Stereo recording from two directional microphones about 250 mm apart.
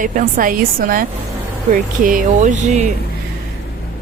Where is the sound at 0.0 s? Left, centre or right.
Right.